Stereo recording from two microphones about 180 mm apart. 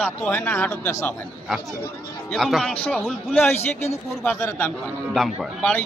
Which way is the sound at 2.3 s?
Centre (ahead or behind).